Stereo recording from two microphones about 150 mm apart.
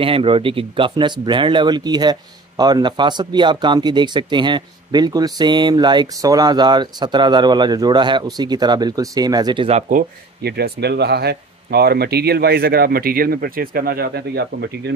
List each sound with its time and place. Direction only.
0.0 s speech: 35° right (ahead or behind)
9.7 s speech: 55° right (ahead or behind); by 14.7 s 90° right